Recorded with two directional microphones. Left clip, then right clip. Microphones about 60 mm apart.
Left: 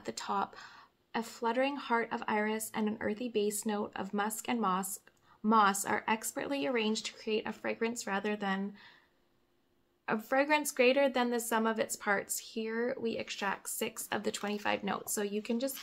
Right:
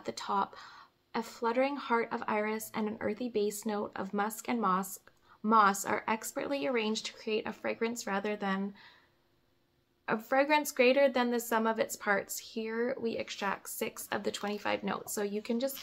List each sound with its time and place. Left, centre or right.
0.0 s speech: left
1.1 s speech: centre
10.0 s speech: centre; by 15.0 s left
15.1 s speech: centre